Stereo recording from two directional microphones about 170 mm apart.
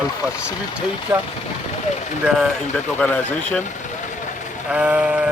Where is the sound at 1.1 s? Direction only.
20° right (ahead or behind).